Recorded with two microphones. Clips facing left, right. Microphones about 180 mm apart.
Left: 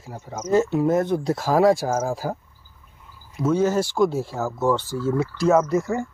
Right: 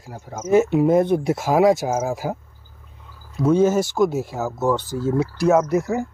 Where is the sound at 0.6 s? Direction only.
20° right (ahead or behind).